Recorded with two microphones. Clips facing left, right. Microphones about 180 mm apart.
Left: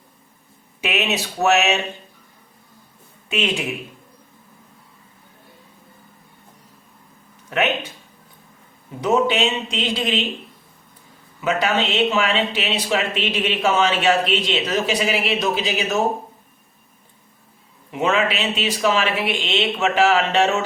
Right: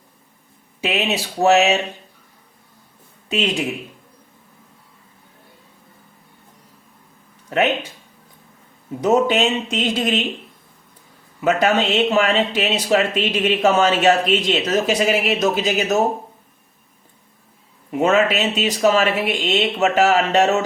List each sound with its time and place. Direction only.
0.8 s speech: 35° right (ahead or behind)
3.2 s speech: 35° right (ahead or behind)
7.5 s speech: 35° right (ahead or behind)
9.0 s speech: 40° right (ahead or behind)
11.3 s speech: 45° right (ahead or behind)
17.9 s speech: 45° right (ahead or behind)